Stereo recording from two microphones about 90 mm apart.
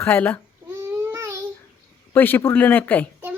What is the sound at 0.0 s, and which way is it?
Speech, 20° left (ahead or behind).